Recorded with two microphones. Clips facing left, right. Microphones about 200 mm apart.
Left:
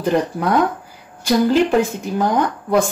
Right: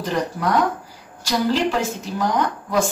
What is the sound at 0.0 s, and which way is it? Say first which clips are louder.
Speech: left 5 dB; 55° left (ahead or behind).